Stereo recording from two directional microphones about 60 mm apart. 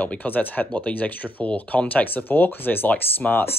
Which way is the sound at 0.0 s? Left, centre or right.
Left.